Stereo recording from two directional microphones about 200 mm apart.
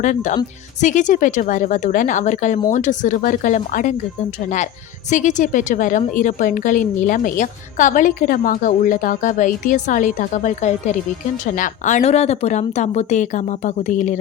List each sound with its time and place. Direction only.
0.0 s speech: 40° left (ahead or behind)